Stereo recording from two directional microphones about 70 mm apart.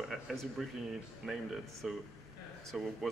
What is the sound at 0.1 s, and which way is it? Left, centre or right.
Speech, centre.